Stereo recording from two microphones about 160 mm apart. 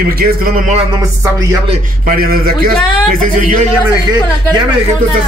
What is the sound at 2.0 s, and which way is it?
Speech, 60° right (ahead or behind).